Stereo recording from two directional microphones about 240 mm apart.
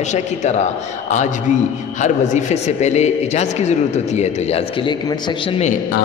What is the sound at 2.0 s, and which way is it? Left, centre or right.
A man's voice, left.